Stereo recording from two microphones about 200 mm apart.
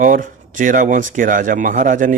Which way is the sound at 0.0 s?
40° right (ahead or behind).